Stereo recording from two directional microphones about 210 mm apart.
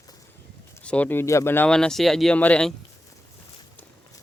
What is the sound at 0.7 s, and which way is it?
Speech, 5° left (ahead or behind).